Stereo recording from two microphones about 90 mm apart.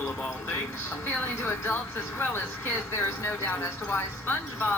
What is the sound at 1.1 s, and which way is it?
Speech, 25° left (ahead or behind).